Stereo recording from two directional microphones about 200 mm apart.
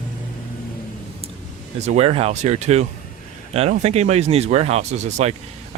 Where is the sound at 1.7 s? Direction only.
35° right (ahead or behind).